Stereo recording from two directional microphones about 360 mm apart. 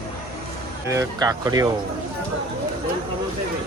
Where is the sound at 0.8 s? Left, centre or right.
Centre.